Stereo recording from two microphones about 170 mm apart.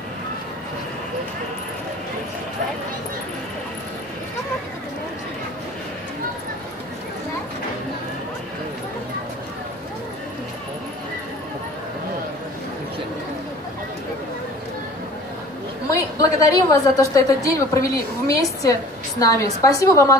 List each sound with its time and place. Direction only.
15.9 s a woman's voice: 20° left (ahead or behind)